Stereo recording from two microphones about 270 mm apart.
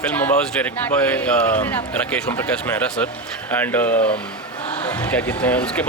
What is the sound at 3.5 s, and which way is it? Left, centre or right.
Speech, centre.